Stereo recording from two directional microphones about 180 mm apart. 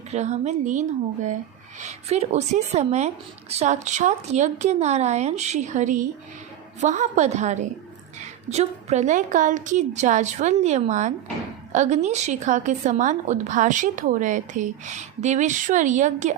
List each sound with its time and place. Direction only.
0.1 s a woman's voice: 40° right (ahead or behind)